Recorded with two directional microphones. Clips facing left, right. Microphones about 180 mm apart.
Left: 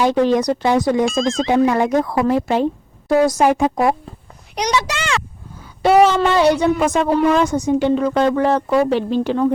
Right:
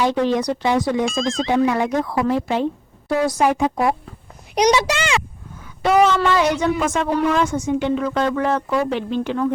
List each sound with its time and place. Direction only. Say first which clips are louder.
0.0 s speech: left 3 dB; 45° left (ahead or behind)
1.0 s speech: left 3 dB; centre (ahead or behind)
1.5 s speech: left 3 dB; 45° left (ahead or behind)
4.5 s a child's voice: right 4 dB; 10° right (ahead or behind)
5.8 s speech: left 3 dB; 30° left (ahead or behind)